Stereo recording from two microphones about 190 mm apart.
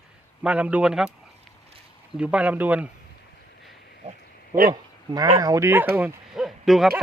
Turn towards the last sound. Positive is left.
turn(degrees=0)  # may be behind; listen again after turning